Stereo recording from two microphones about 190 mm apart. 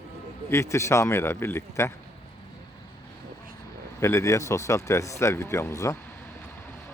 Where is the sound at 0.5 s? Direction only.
15° left (ahead or behind).